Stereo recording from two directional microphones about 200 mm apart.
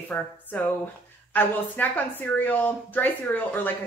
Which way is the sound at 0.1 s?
10° left (ahead or behind).